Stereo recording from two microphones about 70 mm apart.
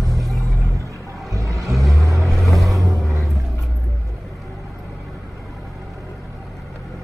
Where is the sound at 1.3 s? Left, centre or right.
Right.